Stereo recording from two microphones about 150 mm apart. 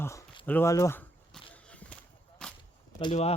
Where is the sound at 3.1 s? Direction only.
45° left (ahead or behind).